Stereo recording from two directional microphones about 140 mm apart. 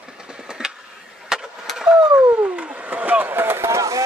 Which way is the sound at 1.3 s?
5° right (ahead or behind).